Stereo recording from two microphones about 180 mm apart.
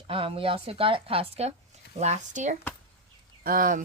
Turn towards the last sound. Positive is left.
turn(degrees=-50)  # may be behind; listen again after turning